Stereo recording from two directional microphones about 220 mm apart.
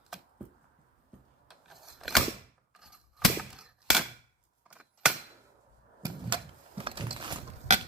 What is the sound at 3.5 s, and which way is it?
Gunshot, 5° right (ahead or behind).